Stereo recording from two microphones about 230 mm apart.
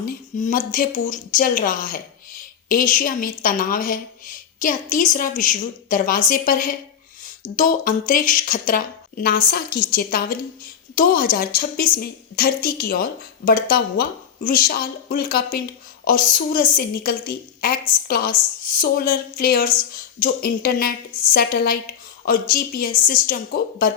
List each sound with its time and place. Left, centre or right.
0.0 s a woman's voice: left